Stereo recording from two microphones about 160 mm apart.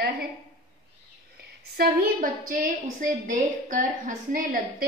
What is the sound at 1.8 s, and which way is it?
A woman's voice, 60° right (ahead or behind).